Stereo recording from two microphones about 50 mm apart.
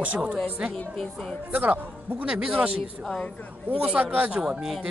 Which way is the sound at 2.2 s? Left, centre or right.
Centre.